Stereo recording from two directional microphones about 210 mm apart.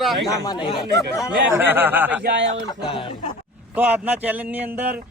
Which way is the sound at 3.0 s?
25° left (ahead or behind).